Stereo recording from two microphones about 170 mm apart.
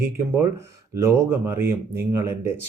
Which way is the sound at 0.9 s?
15° right (ahead or behind).